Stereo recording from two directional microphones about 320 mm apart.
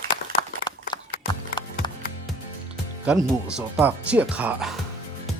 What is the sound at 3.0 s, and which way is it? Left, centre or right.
Speech, centre.